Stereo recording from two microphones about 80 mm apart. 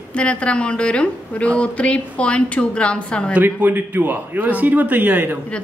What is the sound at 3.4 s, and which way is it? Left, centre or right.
A man's voice, right.